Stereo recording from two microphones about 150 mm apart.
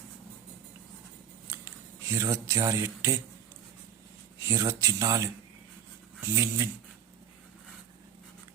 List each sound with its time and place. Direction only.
1.5 s speech: 20° right (ahead or behind)
4.4 s speech: 20° right (ahead or behind)